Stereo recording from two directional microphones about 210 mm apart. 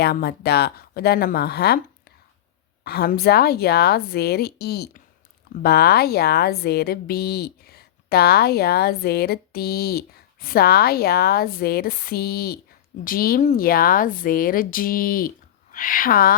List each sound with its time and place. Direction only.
0.0 s a woman's voice: 50° left (ahead or behind)
2.8 s a woman's voice: 50° left (ahead or behind)